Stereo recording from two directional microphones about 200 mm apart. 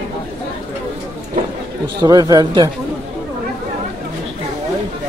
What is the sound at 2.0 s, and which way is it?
Speech, 20° right (ahead or behind).